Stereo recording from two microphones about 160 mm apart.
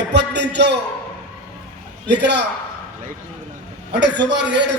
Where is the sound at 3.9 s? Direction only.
90° right.